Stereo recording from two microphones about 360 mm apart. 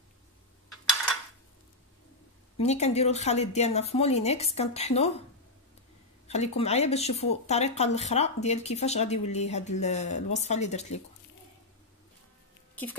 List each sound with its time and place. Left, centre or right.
2.5 s speech: centre
6.2 s speech: centre